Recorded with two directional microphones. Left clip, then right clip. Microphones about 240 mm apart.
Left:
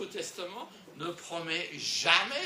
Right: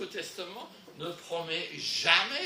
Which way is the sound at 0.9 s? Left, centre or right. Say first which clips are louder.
Right 2 dB; left.